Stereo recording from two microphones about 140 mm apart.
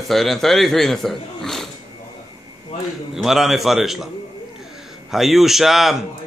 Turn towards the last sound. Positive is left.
turn(degrees=0)  # may be behind; listen again after turning